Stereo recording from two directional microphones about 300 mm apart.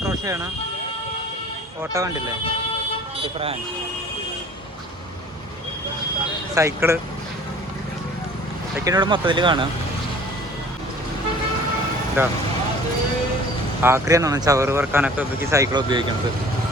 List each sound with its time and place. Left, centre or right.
0.0 s a sound: centre
1.8 s speech: centre
6.5 s speech: centre
8.8 s speech: centre
12.2 s speech: centre
13.8 s speech: centre